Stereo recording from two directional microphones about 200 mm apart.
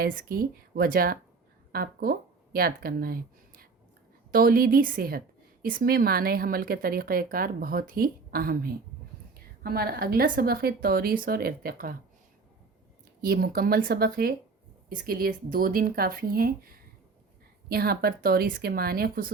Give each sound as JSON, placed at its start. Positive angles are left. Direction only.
{"t": 0.0, "sound": "speech", "side_deg": -45}
{"t": 4.3, "sound": "speech", "side_deg": -45}
{"t": 13.2, "sound": "speech", "side_deg": -50}